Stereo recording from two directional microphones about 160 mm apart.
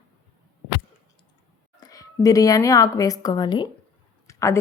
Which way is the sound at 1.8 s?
20° left (ahead or behind).